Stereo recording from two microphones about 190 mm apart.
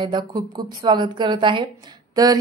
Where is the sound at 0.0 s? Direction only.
25° right (ahead or behind).